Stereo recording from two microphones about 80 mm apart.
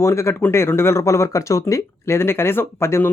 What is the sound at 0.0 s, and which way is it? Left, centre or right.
Speech, left.